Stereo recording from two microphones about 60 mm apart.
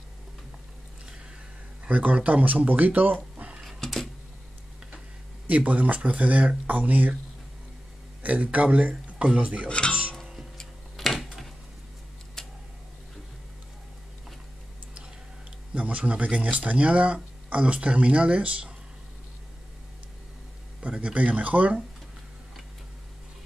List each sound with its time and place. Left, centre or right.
1.9 s speech: right
3.6 s a sound: centre
5.7 s speech: right
8.2 s a man's voice: right
9.7 s speech: centre
10.6 s tick-tock: centre
12.4 s a sound: centre
15.7 s speech: centre
21.0 s speech: right